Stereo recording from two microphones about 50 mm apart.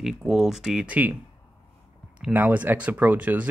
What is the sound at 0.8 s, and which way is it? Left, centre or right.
Speech, right.